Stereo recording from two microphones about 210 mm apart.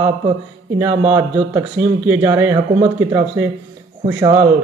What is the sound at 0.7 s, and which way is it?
Speech, 10° right (ahead or behind).